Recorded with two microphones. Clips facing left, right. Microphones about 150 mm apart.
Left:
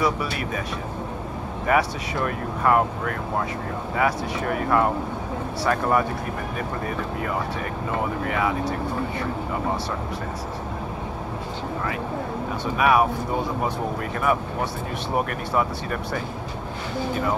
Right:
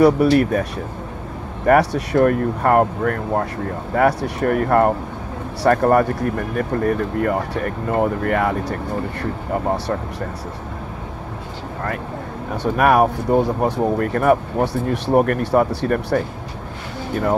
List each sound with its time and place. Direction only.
0.0 s speech: 55° right (ahead or behind)
1.7 s speech: 65° right (ahead or behind)
12.6 s speech: 55° right (ahead or behind)